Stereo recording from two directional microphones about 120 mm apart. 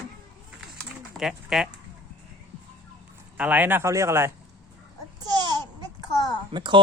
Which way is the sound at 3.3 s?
15° right (ahead or behind).